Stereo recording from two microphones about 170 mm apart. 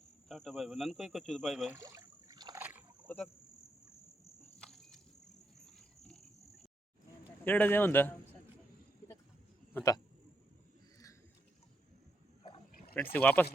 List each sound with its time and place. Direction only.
0.3 s speech: centre (ahead or behind)
1.7 s rowboat: 20° right (ahead or behind)
2.6 s rowboat: 10° right (ahead or behind)
3.1 s a man's voice: 10° left (ahead or behind)
4.6 s a sound: centre (ahead or behind)
6.1 s cricket: centre (ahead or behind)
7.4 s a man's voice: 10° left (ahead or behind)
9.7 s speech: 20° left (ahead or behind)
13.1 s a man's voice: 10° left (ahead or behind)